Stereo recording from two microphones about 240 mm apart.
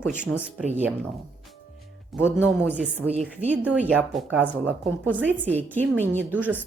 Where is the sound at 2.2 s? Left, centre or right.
Centre.